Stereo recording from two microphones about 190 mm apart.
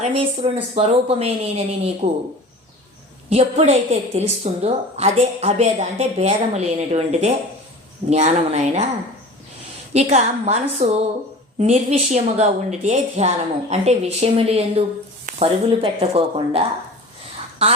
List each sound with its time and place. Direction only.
0.0 s a woman's voice: 30° right (ahead or behind)
3.2 s a woman's voice: 35° right (ahead or behind)
9.9 s a woman's voice: 35° right (ahead or behind)